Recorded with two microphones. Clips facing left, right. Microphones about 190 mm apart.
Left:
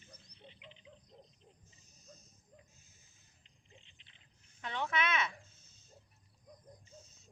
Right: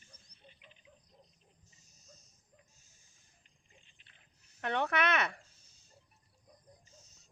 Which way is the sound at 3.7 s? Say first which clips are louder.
Left 5 dB; 20° left (ahead or behind).